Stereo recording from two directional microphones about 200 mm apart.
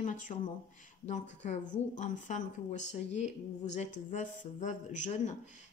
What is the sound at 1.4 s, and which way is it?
Speech, 35° left (ahead or behind).